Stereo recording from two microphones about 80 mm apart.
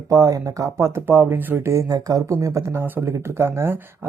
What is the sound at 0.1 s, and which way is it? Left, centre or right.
Speech, right.